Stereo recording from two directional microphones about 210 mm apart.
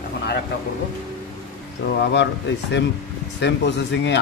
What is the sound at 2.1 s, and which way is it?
Speech, 55° left (ahead or behind).